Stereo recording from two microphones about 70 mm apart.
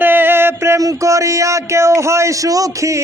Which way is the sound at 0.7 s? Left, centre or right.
Right.